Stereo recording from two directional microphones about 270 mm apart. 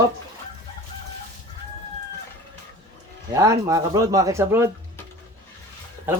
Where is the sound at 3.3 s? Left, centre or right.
Centre.